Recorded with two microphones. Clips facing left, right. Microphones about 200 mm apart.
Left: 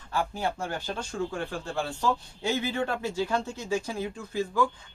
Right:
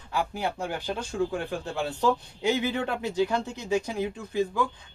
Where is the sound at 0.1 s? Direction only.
15° right (ahead or behind).